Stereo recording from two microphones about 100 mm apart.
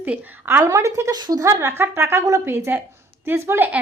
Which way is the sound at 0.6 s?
35° right (ahead or behind).